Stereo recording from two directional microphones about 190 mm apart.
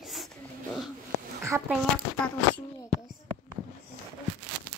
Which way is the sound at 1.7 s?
5° left (ahead or behind).